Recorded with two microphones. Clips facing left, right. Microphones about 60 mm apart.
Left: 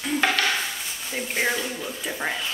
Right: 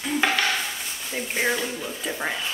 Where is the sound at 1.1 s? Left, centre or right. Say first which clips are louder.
Even; centre.